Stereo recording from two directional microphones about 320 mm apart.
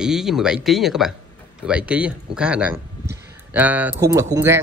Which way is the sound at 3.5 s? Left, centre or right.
Centre.